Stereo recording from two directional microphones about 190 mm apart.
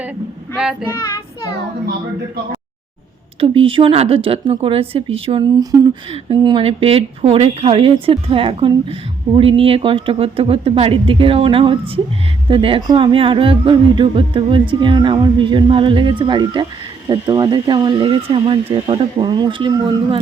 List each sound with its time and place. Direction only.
0.5 s child singing: 5° right (ahead or behind)
3.4 s speech: 30° right (ahead or behind)